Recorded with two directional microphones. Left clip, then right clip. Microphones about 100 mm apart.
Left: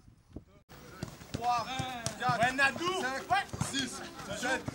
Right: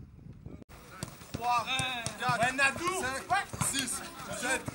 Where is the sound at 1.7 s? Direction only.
30° right (ahead or behind).